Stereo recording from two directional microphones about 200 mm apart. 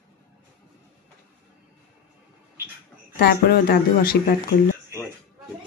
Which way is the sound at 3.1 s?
50° left (ahead or behind).